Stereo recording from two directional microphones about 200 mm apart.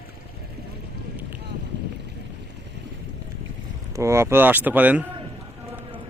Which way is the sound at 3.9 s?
15° right (ahead or behind).